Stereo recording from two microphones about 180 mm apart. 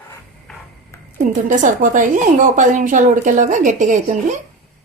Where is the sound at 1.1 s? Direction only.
45° right (ahead or behind).